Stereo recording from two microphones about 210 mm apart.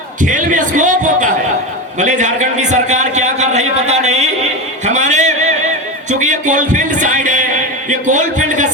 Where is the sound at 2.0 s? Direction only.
35° right (ahead or behind).